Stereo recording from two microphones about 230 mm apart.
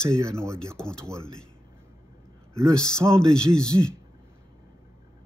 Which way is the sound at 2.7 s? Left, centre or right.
Centre.